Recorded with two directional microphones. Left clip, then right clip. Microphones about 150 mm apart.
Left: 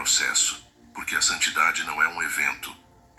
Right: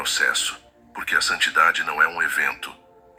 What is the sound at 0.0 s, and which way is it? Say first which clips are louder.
Speech: right 2 dB; 45° right (ahead or behind).